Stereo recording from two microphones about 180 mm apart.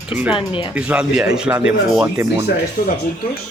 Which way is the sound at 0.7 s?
5° right (ahead or behind).